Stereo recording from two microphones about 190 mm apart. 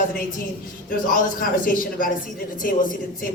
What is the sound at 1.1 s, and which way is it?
Speech, 45° left (ahead or behind).